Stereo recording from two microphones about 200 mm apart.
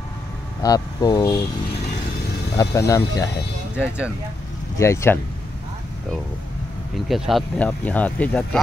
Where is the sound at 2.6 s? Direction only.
15° left (ahead or behind).